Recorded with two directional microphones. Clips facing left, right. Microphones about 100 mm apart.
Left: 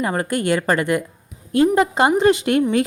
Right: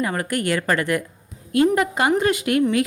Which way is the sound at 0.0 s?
25° left (ahead or behind).